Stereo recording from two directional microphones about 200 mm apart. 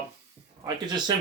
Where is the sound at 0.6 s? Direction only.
20° right (ahead or behind).